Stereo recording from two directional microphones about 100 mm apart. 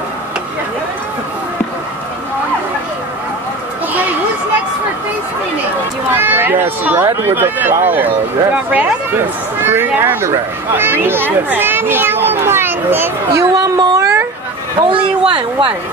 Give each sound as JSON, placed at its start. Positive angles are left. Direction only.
{"t": 6.1, "sound": "speech", "side_deg": -20}
{"t": 13.4, "sound": "a woman's voice", "side_deg": -40}
{"t": 14.8, "sound": "speech", "side_deg": -60}